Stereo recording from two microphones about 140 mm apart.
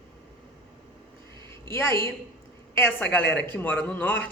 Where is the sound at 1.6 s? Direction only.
20° left (ahead or behind).